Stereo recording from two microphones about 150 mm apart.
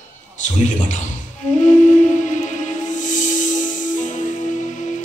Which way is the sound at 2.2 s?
55° left (ahead or behind).